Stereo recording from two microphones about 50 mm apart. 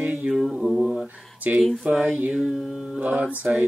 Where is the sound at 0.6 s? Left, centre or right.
Centre.